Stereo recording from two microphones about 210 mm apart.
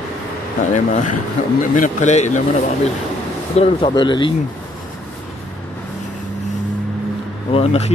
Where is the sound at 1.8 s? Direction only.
35° left (ahead or behind).